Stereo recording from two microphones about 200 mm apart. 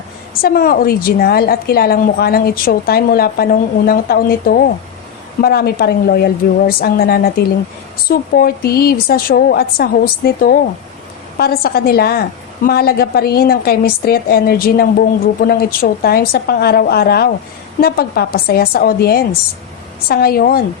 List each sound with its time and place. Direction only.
0.4 s a woman's voice: 50° left (ahead or behind)